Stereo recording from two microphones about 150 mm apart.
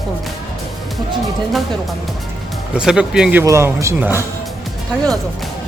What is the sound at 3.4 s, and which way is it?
Speech, 20° right (ahead or behind).